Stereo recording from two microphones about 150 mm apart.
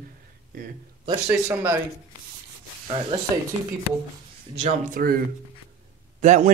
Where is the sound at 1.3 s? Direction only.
15° right (ahead or behind).